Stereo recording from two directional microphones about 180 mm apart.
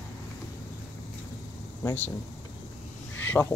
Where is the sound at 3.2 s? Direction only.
10° left (ahead or behind).